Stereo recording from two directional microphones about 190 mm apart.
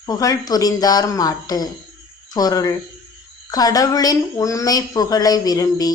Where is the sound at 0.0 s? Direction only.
20° left (ahead or behind).